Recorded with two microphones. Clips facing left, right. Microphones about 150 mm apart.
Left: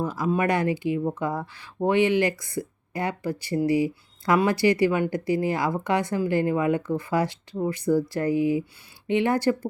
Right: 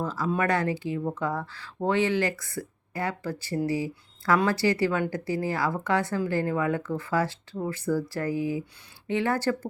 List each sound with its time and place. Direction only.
0.0 s speech: 15° left (ahead or behind)